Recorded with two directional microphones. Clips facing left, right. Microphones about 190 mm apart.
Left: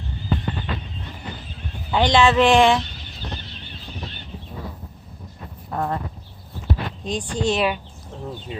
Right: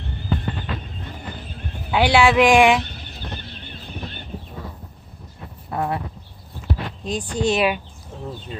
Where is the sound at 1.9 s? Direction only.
10° right (ahead or behind).